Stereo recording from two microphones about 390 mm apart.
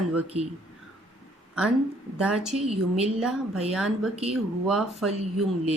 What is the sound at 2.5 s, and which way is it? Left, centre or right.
Speech, centre.